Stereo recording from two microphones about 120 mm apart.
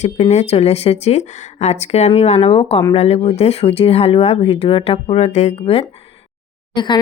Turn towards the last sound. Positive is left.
turn(degrees=40)  # may be behind; listen again after turning